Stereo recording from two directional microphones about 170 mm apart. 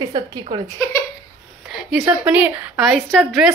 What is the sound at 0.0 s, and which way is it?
Speech, 25° right (ahead or behind).